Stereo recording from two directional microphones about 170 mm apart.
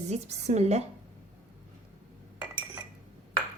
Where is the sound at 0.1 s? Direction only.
40° right (ahead or behind).